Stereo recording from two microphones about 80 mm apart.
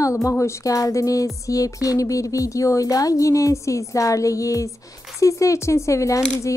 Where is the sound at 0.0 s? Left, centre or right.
Left.